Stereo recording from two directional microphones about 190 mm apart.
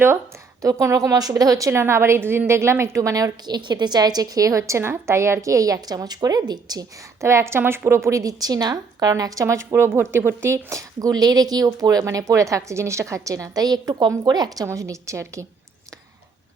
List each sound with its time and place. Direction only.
0.6 s a woman's voice: 15° right (ahead or behind)